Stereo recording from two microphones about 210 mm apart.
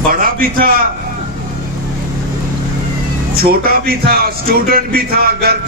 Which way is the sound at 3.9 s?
45° right (ahead or behind).